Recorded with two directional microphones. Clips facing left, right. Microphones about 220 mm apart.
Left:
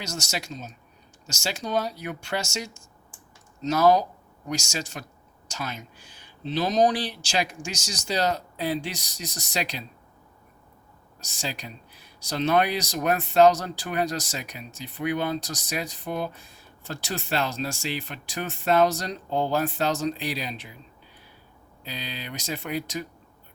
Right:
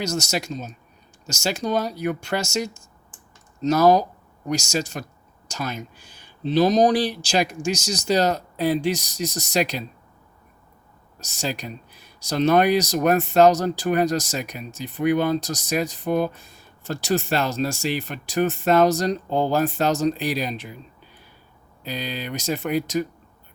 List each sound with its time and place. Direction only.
0.0 s speech: 40° right (ahead or behind)
11.2 s speech: 45° right (ahead or behind)
21.8 s speech: 45° right (ahead or behind)